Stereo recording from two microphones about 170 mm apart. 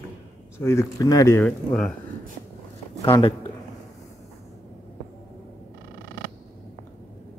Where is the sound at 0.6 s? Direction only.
15° left (ahead or behind).